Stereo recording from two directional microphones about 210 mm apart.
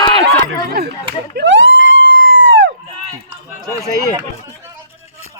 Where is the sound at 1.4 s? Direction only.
60° right (ahead or behind).